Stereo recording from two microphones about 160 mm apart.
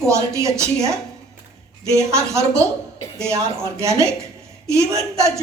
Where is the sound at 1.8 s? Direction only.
15° right (ahead or behind).